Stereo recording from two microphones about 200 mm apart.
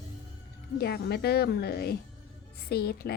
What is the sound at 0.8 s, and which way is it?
A woman's voice, 55° left (ahead or behind).